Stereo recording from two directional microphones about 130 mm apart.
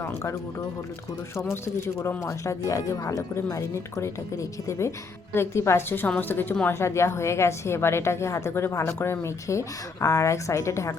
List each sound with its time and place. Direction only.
1.6 s a woman's voice: 20° left (ahead or behind)
5.3 s a woman's voice: 20° left (ahead or behind)